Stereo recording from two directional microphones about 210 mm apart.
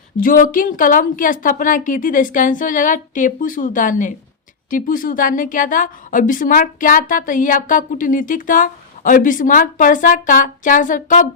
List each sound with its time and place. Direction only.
0.2 s a woman's voice: 40° left (ahead or behind)